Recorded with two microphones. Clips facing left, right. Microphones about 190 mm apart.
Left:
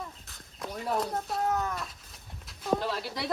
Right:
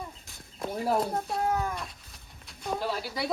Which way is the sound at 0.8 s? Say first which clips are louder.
Right 4 dB; 30° right (ahead or behind).